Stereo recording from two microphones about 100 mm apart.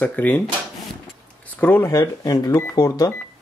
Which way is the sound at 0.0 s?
15° left (ahead or behind).